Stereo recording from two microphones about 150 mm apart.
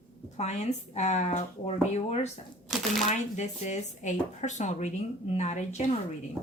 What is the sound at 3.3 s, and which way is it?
Speech, 50° left (ahead or behind).